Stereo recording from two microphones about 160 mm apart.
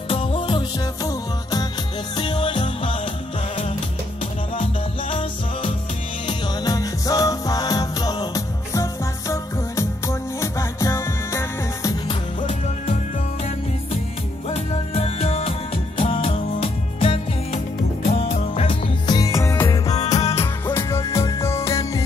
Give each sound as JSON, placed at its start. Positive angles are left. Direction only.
{"t": 0.1, "sound": "music", "side_deg": 35}
{"t": 6.2, "sound": "music", "side_deg": 25}
{"t": 12.4, "sound": "music", "side_deg": 45}
{"t": 14.5, "sound": "music", "side_deg": 40}
{"t": 19.0, "sound": "music", "side_deg": 20}
{"t": 20.2, "sound": "music", "side_deg": 40}
{"t": 20.6, "sound": "music", "side_deg": 15}